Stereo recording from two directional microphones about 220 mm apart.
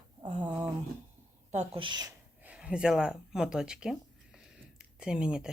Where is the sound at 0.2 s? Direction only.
20° right (ahead or behind).